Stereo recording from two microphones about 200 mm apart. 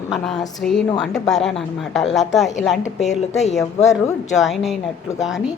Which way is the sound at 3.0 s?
35° left (ahead or behind).